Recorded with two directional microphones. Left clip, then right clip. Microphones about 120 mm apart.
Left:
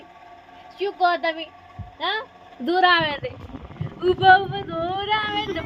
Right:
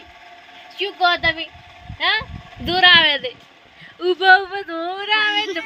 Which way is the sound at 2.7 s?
60° left (ahead or behind).